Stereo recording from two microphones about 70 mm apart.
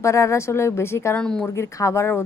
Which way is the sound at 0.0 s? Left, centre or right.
Left.